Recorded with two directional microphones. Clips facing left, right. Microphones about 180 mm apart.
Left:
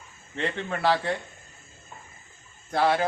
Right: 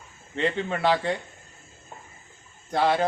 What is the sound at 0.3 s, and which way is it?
Speech, centre (ahead or behind).